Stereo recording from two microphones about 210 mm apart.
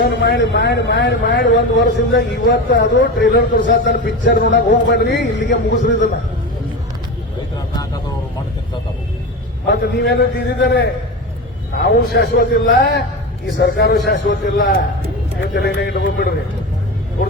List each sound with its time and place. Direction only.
0.0 s a man's voice: 50° left (ahead or behind)
9.6 s a man's voice: 50° left (ahead or behind)